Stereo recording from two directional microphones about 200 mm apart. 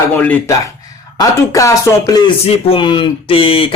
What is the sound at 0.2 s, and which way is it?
Speech, 10° left (ahead or behind).